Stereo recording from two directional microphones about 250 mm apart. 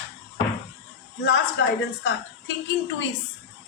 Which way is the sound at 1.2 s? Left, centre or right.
Left.